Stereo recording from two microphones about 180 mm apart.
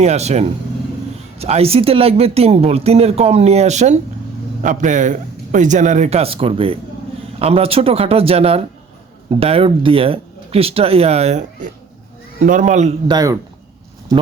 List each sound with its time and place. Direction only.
0.0 s a man's voice: 35° right (ahead or behind)
13.1 s speech: 20° right (ahead or behind)